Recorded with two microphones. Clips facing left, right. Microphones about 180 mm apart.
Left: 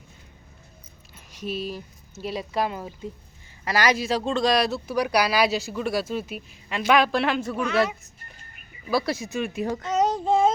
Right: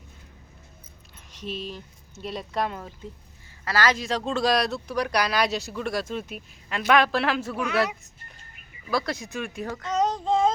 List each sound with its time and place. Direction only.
1.1 s a man's voice: 10° left (ahead or behind)
4.0 s speech: 5° left (ahead or behind)
8.9 s speech: 5° left (ahead or behind)
9.6 s a child's voice: 20° left (ahead or behind)
9.9 s child singing: 5° left (ahead or behind)